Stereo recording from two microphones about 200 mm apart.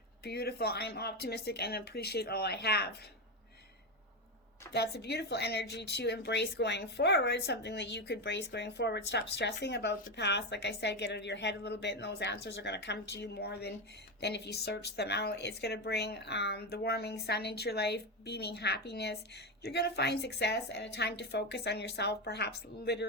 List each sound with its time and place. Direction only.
0.3 s speech: 55° left (ahead or behind)
4.7 s speech: 55° left (ahead or behind)